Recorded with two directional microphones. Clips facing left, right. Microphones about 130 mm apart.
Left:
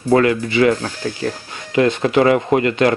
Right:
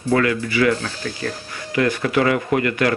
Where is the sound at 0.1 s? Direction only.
30° left (ahead or behind).